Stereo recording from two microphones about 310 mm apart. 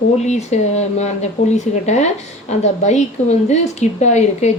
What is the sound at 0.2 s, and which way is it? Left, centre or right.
A woman's voice, left.